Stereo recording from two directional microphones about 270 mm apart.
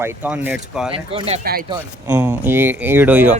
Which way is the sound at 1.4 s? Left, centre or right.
Right.